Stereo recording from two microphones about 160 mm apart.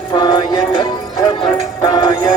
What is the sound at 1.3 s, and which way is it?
Synthetic singing, 25° left (ahead or behind).